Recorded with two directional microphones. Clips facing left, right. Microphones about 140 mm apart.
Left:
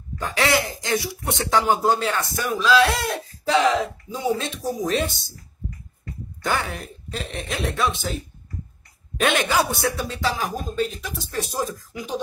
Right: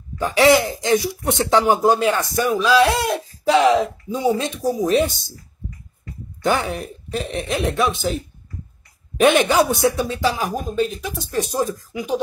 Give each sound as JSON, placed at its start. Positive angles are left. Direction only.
{"t": 0.2, "sound": "speech", "side_deg": -15}
{"t": 6.4, "sound": "speech", "side_deg": -20}
{"t": 9.2, "sound": "speech", "side_deg": -15}